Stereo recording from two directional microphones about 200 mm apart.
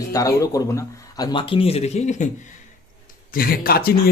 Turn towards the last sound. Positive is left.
turn(degrees=50)  # may be behind; listen again after turning